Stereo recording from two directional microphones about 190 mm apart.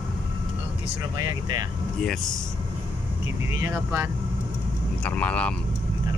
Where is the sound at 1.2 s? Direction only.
20° right (ahead or behind).